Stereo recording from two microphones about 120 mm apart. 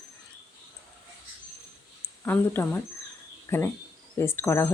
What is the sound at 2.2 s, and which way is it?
Speech, 20° left (ahead or behind).